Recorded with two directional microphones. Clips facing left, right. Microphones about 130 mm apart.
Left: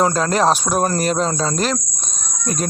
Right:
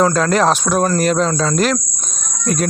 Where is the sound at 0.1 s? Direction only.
35° left (ahead or behind).